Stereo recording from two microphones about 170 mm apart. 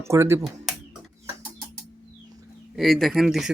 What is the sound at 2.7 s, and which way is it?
Speech, centre (ahead or behind).